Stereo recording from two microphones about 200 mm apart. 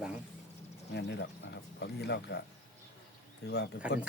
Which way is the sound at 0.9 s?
55° left (ahead or behind).